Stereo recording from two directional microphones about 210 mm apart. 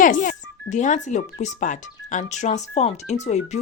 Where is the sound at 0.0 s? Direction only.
40° left (ahead or behind).